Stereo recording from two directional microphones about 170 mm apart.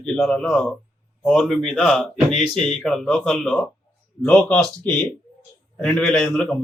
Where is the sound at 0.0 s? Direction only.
5° left (ahead or behind).